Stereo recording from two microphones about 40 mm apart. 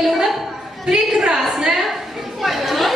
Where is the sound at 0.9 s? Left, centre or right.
Centre.